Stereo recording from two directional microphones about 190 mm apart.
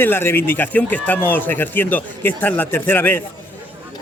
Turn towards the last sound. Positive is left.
turn(degrees=10)  # may be behind; listen again after turning